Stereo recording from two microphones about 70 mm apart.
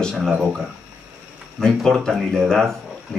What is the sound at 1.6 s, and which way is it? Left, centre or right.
Speech, centre.